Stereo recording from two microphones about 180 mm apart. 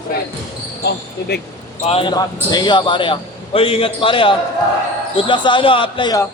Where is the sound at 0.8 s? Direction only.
65° left (ahead or behind).